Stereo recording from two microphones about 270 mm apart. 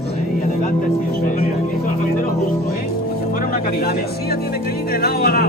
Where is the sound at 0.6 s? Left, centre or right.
Left.